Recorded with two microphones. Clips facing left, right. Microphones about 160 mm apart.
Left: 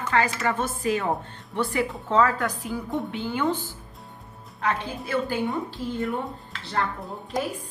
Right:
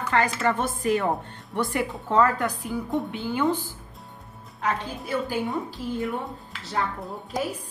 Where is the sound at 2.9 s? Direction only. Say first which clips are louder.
Right 2 dB; centre (ahead or behind).